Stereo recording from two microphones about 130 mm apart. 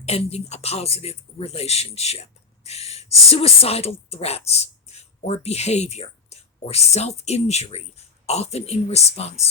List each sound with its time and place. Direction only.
0.0 s speech: 55° left (ahead or behind)